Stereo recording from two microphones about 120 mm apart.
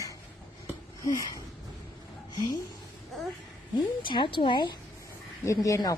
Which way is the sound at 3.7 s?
40° left (ahead or behind).